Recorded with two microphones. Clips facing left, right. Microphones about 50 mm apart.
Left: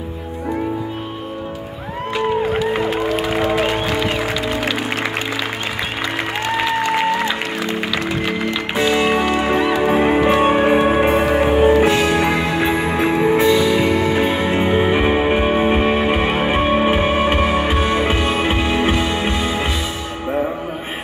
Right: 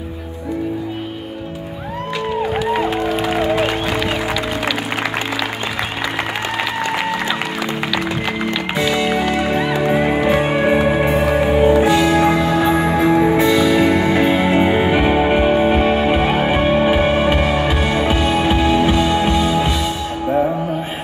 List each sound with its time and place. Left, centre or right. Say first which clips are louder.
8.7 s music: left 2 dB; left
10.5 s music: left 1 dB; left
12.4 s music: right 3 dB; centre
13.5 s music: right 1 dB; centre; by 19.7 s left